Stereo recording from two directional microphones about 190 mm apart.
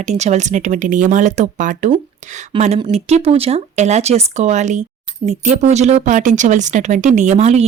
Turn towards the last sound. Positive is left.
turn(degrees=-35)  # may be behind; listen again after turning